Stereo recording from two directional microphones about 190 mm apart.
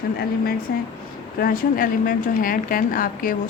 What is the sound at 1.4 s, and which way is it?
A woman's voice, 50° left (ahead or behind).